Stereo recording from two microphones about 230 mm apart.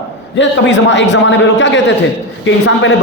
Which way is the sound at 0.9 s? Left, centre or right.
Left.